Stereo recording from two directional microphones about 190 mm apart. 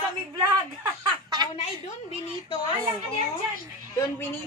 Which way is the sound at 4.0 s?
10° left (ahead or behind).